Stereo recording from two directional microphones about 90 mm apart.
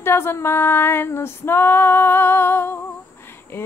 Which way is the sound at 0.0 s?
30° left (ahead or behind).